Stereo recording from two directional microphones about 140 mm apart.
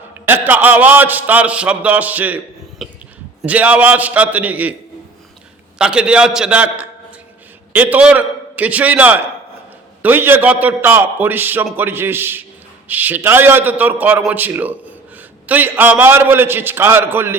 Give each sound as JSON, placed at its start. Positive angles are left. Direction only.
{"t": 0.3, "sound": "a man's voice", "side_deg": -15}
{"t": 5.8, "sound": "a man's voice", "side_deg": -5}